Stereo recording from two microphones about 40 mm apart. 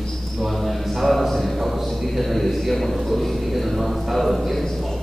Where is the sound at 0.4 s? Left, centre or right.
Centre.